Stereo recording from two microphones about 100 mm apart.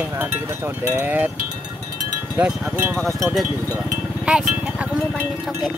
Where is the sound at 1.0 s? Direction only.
20° right (ahead or behind).